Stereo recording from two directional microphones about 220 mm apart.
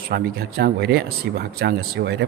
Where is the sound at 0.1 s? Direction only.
45° right (ahead or behind).